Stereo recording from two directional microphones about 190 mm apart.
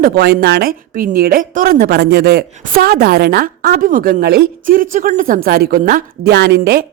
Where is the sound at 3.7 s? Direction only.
45° right (ahead or behind).